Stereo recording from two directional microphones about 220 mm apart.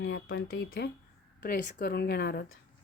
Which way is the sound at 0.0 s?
55° left (ahead or behind).